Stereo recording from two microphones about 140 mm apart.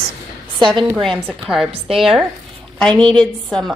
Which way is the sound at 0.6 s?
35° right (ahead or behind).